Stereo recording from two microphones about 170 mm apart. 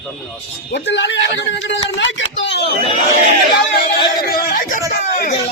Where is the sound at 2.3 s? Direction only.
90° left.